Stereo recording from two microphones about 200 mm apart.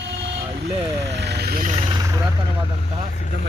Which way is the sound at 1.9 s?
15° right (ahead or behind).